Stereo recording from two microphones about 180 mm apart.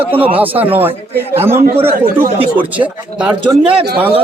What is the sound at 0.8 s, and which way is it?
A man's voice, 10° right (ahead or behind).